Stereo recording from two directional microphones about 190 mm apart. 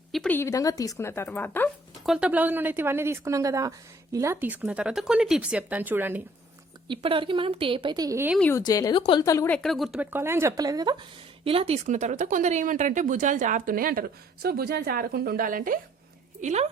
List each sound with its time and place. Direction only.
0.1 s speech: 5° left (ahead or behind)
2.0 s speech: 5° right (ahead or behind)
6.8 s speech: 25° right (ahead or behind)
8.4 s speech: 10° left (ahead or behind)
8.6 s speech: 20° left (ahead or behind)
9.6 s speech: centre (ahead or behind); by 10.9 s 20° right (ahead or behind)
11.4 s speech: 30° right (ahead or behind)